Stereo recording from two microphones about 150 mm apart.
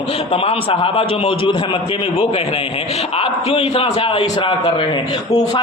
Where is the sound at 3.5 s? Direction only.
40° left (ahead or behind).